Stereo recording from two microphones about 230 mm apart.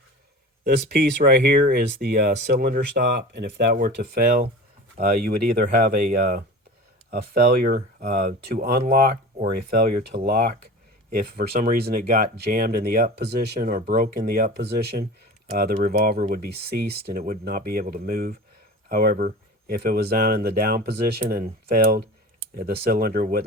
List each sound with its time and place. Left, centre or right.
0.6 s speech: right